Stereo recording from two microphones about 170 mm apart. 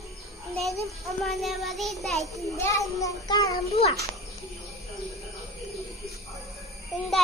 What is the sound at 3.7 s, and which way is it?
Speech, 35° left (ahead or behind).